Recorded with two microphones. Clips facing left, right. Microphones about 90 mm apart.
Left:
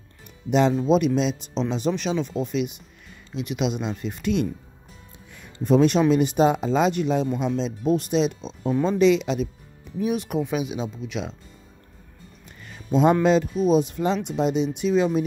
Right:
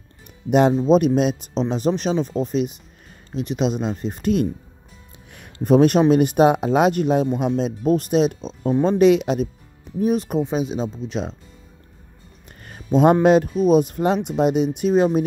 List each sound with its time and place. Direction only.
0.5 s speech: 50° right (ahead or behind)
5.3 s speech: 55° right (ahead or behind)
9.9 s speech: 40° right (ahead or behind)
12.4 s speech: 50° right (ahead or behind)